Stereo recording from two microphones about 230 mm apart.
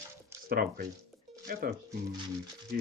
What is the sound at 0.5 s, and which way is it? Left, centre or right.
Speech, right.